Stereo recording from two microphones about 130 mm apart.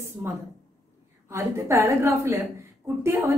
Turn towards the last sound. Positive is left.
turn(degrees=-20)  # may be behind; listen again after turning